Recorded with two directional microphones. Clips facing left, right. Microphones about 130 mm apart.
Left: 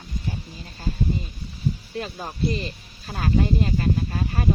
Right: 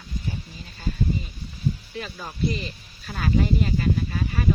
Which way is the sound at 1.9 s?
40° left (ahead or behind).